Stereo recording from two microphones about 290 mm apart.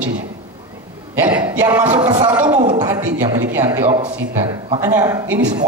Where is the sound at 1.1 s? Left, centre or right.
Centre.